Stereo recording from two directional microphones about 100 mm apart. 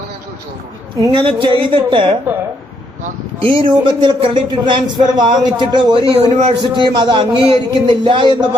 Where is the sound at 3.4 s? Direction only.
60° right (ahead or behind).